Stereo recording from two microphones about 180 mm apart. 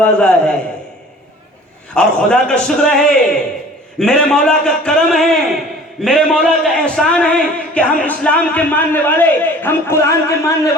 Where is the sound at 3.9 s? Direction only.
5° left (ahead or behind).